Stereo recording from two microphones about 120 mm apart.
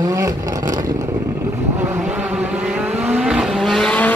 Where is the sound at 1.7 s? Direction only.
15° right (ahead or behind); by 4.2 s 10° left (ahead or behind).